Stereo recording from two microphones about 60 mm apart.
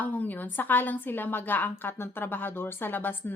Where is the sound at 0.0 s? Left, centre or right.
Left.